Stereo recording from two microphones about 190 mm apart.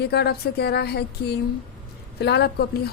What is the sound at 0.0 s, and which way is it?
A woman's voice, 60° left (ahead or behind).